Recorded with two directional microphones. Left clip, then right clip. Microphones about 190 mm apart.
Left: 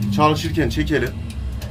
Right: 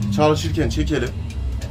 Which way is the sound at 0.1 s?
Centre (ahead or behind).